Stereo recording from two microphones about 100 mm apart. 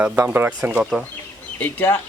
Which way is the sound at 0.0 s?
20° right (ahead or behind).